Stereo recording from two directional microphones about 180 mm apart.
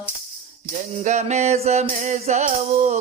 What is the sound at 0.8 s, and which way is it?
Music, 40° right (ahead or behind).